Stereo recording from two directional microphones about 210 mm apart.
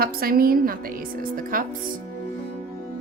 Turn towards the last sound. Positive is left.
turn(degrees=-40)  # may be behind; listen again after turning